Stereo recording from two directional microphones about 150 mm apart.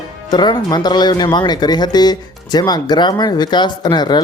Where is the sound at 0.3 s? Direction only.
30° left (ahead or behind).